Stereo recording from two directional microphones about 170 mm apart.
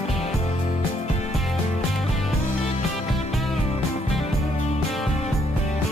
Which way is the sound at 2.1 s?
40° left (ahead or behind).